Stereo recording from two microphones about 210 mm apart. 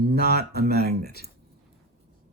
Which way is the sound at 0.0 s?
50° right (ahead or behind).